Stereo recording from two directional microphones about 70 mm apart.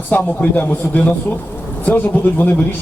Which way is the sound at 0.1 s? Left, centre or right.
Left.